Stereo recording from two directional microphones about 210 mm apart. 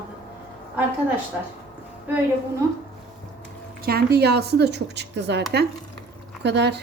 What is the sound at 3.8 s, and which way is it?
Speech, 45° right (ahead or behind).